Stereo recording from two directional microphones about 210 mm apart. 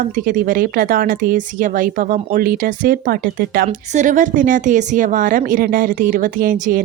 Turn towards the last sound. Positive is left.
turn(degrees=-40)  # may be behind; listen again after turning